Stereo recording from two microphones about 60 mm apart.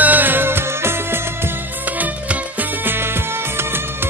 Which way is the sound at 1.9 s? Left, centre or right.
Right.